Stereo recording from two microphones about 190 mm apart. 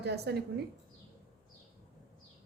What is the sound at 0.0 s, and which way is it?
Speech, 60° right (ahead or behind).